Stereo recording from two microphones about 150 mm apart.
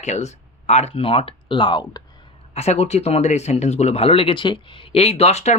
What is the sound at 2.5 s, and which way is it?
Speech, 45° left (ahead or behind).